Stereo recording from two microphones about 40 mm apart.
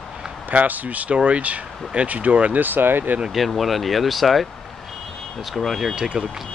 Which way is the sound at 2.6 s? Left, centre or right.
Right.